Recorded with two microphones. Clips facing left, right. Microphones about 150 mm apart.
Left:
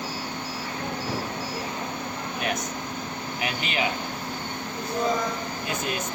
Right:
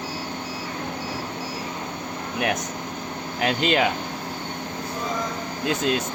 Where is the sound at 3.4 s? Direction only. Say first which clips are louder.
Right 9 dB; 65° right (ahead or behind).